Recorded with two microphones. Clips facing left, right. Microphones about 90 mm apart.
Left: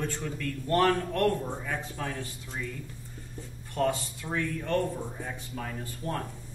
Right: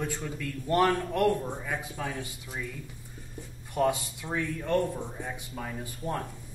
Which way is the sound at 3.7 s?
10° right (ahead or behind).